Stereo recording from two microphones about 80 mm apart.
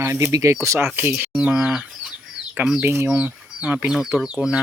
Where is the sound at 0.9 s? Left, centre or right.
Right.